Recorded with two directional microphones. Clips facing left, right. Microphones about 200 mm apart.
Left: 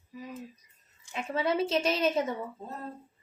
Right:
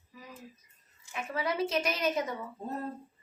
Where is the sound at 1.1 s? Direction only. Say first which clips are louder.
Left 4 dB; 25° left (ahead or behind).